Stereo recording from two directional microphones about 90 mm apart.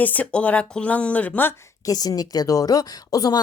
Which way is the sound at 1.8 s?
45° left (ahead or behind).